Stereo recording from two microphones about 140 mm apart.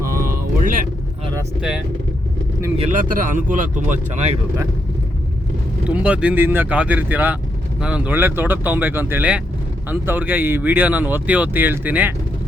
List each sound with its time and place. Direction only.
0.0 s a sound: 90° right
3.1 s speech: 70° right (ahead or behind)
5.8 s speech: 10° right (ahead or behind)